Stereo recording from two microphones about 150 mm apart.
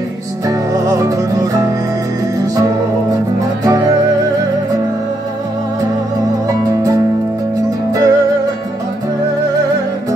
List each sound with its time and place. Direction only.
0.5 s music: 25° right (ahead or behind)
3.6 s music: 25° right (ahead or behind)
6.4 s music: 25° right (ahead or behind)